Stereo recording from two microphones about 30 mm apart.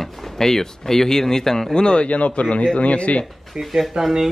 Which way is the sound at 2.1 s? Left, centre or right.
Left.